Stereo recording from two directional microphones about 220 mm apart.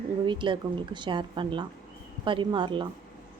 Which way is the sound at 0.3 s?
20° right (ahead or behind).